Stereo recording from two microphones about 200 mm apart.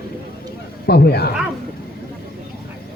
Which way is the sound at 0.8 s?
55° left (ahead or behind).